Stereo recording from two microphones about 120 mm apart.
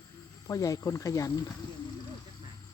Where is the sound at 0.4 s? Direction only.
30° left (ahead or behind).